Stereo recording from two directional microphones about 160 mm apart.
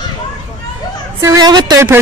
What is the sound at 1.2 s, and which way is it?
Speech, 20° right (ahead or behind).